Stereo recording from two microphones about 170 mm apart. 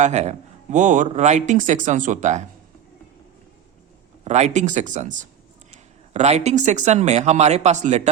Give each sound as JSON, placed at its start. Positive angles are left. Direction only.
{"t": 0.0, "sound": "speech", "side_deg": -40}
{"t": 4.2, "sound": "speech", "side_deg": -40}